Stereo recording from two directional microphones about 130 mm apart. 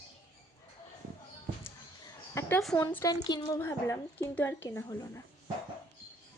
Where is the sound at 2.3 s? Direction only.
20° left (ahead or behind).